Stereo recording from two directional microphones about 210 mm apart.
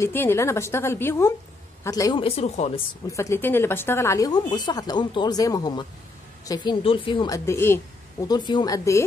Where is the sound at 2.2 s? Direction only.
30° left (ahead or behind).